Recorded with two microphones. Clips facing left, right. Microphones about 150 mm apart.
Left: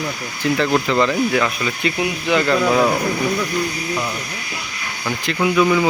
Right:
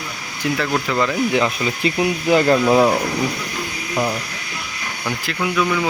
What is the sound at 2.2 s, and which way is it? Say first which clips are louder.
Speech: right 2 dB; 40° right (ahead or behind).